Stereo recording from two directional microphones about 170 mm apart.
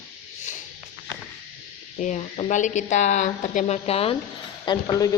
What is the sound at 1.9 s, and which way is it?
A woman's voice, 45° left (ahead or behind).